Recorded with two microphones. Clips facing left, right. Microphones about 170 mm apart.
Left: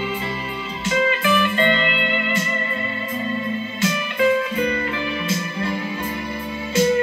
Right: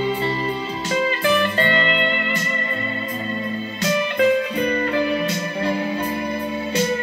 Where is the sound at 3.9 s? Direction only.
35° right (ahead or behind).